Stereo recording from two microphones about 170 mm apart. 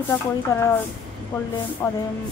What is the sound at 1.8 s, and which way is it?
Speech, 15° left (ahead or behind).